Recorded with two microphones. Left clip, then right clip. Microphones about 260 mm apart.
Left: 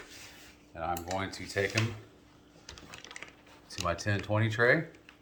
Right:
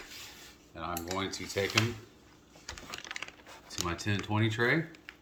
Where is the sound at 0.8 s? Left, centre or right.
Centre.